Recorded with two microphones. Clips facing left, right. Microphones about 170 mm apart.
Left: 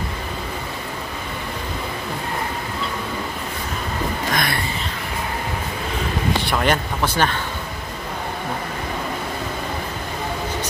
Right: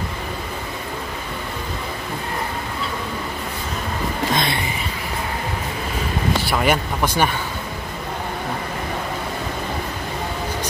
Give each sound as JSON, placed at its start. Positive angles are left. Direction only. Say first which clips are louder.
{"t": 4.3, "sound": "music", "louder": "right 2 dB", "side_deg": -25}
{"t": 6.4, "sound": "speech", "louder": "right 1 dB", "side_deg": -5}